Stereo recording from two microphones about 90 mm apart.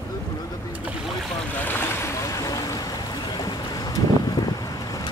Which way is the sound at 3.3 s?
50° left (ahead or behind).